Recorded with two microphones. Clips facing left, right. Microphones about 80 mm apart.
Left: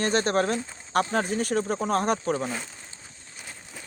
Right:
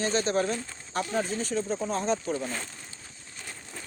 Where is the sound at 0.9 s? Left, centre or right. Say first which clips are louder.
Left 5 dB; left.